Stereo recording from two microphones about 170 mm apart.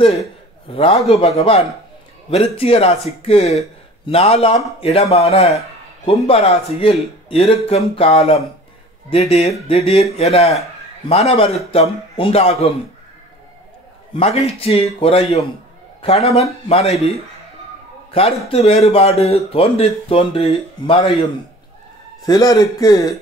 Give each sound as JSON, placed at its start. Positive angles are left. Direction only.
{"t": 0.7, "sound": "speech", "side_deg": 35}
{"t": 14.1, "sound": "speech", "side_deg": 35}
{"t": 18.5, "sound": "speech", "side_deg": 40}
{"t": 22.2, "sound": "speech", "side_deg": 20}